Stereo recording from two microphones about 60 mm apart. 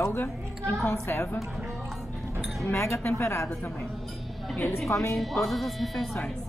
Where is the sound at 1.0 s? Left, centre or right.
Left.